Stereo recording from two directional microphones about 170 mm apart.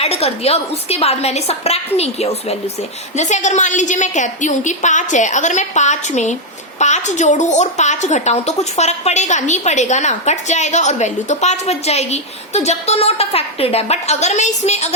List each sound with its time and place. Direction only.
0.0 s a woman's voice: 35° left (ahead or behind)